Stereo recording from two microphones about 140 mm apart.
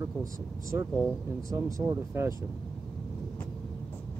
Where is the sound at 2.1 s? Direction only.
20° right (ahead or behind).